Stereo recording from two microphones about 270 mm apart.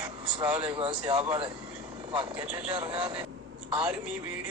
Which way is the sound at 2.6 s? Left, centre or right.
Centre.